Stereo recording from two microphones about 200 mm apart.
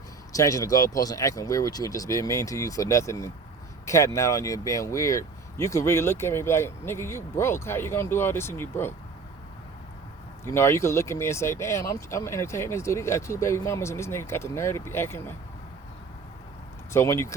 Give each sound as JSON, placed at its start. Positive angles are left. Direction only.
{"t": 0.3, "sound": "speech", "side_deg": 15}
{"t": 10.4, "sound": "speech", "side_deg": 15}
{"t": 16.9, "sound": "speech", "side_deg": 15}